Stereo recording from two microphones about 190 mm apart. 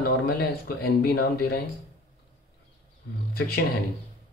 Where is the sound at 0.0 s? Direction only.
50° left (ahead or behind).